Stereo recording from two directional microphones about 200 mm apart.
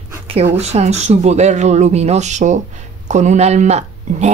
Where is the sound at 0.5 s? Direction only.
30° right (ahead or behind).